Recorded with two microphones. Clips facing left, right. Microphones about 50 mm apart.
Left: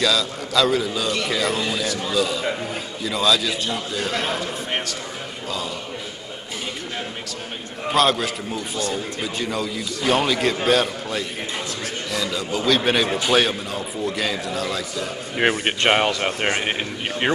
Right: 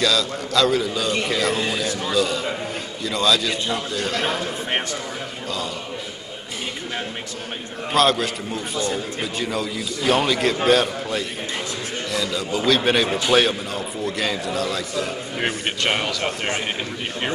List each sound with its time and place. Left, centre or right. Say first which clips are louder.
0.0 s a man's voice: even; centre
4.4 s a man's voice: right 1 dB; centre
7.9 s a man's voice: right 1 dB; centre
15.4 s speech: left 5 dB; left